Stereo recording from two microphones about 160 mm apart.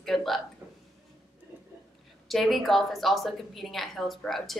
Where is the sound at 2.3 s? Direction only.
Centre (ahead or behind).